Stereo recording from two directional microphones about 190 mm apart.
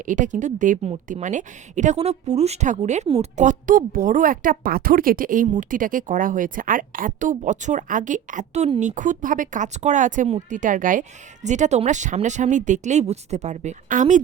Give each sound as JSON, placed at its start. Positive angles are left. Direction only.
{"t": 0.0, "sound": "a woman's voice", "side_deg": -40}